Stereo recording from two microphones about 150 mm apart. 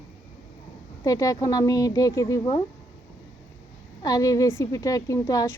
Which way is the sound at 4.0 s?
25° left (ahead or behind).